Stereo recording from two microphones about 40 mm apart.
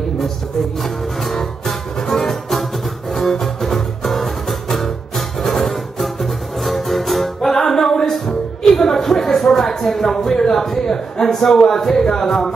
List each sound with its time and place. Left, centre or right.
0.8 s music: centre
7.5 s music: centre